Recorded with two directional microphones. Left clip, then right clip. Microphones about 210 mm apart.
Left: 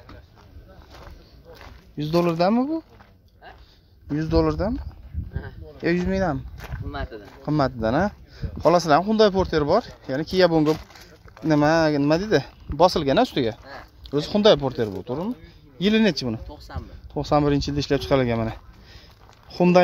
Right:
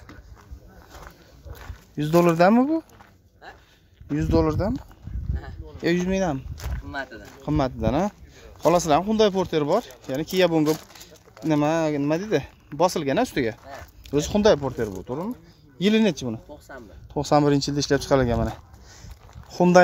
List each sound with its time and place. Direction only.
2.0 s speech: 15° right (ahead or behind)
4.1 s speech: 5° right (ahead or behind)
5.8 s speech: 5° right (ahead or behind)
6.9 s speech: 55° right (ahead or behind)
7.2 s speech: 5° left (ahead or behind)
15.8 s speech: centre (ahead or behind)
16.4 s speech: 40° left (ahead or behind)
17.1 s speech: 10° right (ahead or behind)